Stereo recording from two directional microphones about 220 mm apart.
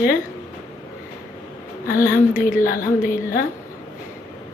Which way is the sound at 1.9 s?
40° left (ahead or behind).